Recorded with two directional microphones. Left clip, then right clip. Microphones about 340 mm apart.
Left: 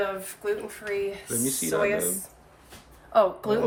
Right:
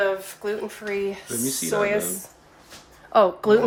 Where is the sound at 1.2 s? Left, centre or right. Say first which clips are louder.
Right 2 dB; centre.